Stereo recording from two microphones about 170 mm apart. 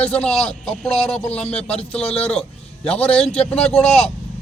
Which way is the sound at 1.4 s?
35° left (ahead or behind).